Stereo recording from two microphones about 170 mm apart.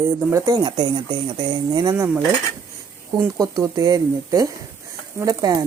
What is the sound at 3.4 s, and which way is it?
A woman's voice, 20° right (ahead or behind).